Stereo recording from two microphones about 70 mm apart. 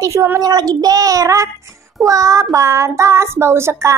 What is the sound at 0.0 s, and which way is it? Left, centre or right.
Child singing, right.